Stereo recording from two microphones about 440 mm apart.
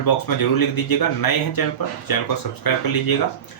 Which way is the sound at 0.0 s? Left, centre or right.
Left.